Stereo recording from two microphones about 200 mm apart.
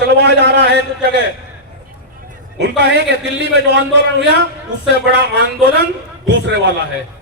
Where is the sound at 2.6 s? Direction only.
60° right (ahead or behind).